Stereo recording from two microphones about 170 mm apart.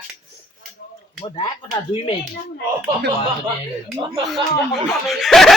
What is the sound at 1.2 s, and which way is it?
Speech, 25° left (ahead or behind).